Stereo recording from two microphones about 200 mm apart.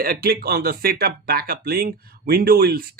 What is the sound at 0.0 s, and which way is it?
Speech, 50° right (ahead or behind).